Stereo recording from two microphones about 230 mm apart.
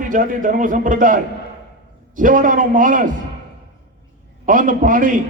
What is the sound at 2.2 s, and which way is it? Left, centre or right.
Speech, right.